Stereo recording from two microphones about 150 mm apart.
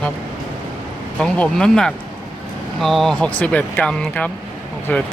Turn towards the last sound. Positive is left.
turn(degrees=10)  # may be behind; listen again after turning